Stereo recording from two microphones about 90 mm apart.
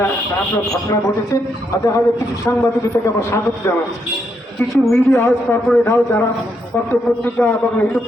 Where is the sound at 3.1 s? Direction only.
30° left (ahead or behind).